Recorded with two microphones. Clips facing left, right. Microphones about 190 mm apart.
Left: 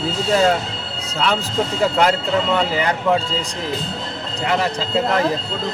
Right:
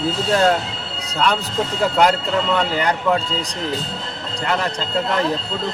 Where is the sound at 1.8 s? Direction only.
Centre (ahead or behind).